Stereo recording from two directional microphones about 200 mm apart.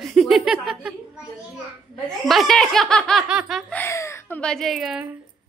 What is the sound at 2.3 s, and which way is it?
Speech, centre (ahead or behind).